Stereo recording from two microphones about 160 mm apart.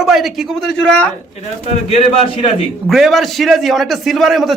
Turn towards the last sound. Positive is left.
turn(degrees=0)  # may be behind; listen again after turning